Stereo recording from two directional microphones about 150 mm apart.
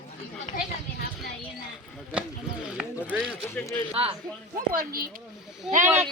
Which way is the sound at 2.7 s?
10° right (ahead or behind).